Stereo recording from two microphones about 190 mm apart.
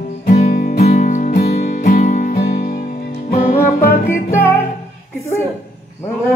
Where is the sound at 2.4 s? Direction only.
55° left (ahead or behind).